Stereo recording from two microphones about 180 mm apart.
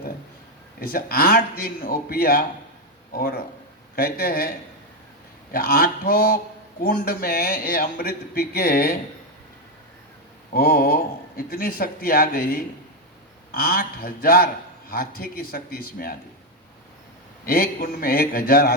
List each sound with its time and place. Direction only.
0.8 s a man's voice: 55° left (ahead or behind)
10.5 s a man's voice: 55° left (ahead or behind)
17.4 s a man's voice: 55° left (ahead or behind)